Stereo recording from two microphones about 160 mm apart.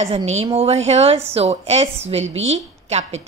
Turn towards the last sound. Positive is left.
turn(degrees=-45)  # may be behind; listen again after turning